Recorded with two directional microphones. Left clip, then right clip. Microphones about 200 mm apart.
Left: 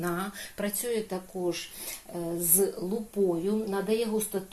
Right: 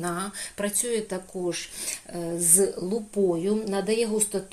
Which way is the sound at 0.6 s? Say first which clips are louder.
Right 3 dB; 20° right (ahead or behind).